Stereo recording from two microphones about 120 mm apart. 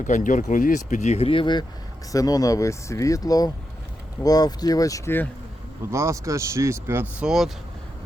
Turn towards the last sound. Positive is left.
turn(degrees=-5)  # may be behind; listen again after turning